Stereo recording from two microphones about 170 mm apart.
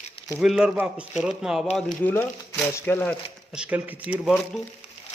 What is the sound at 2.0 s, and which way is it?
Speech, 15° left (ahead or behind).